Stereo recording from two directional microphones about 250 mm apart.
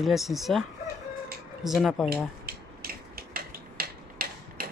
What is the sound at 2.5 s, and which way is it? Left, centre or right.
Mechanisms, right.